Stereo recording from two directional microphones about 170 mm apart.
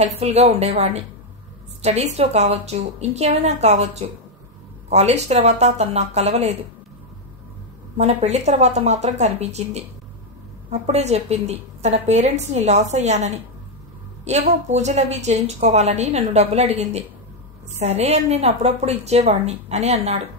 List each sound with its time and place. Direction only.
0.2 s a woman's voice: 40° right (ahead or behind)
8.0 s a woman's voice: 40° right (ahead or behind)